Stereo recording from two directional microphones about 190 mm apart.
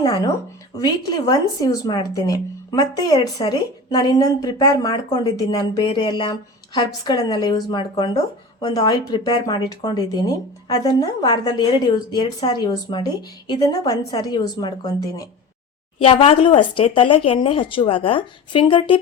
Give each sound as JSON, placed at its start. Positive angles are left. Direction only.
{"t": 0.8, "sound": "speech", "side_deg": 20}